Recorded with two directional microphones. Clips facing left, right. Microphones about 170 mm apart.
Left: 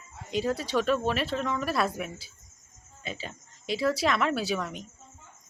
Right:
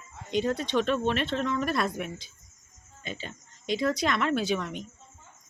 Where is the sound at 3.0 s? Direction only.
35° left (ahead or behind).